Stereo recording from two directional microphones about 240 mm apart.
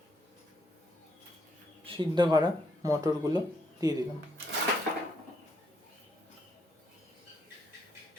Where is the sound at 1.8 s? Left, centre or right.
Right.